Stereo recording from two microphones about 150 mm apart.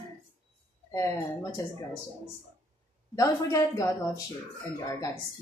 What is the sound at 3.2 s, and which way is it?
Speech, 20° left (ahead or behind).